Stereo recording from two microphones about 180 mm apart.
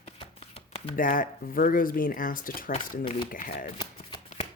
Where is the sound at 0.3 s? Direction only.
30° left (ahead or behind).